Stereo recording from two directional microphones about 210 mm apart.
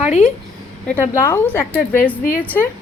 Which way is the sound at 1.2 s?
10° left (ahead or behind).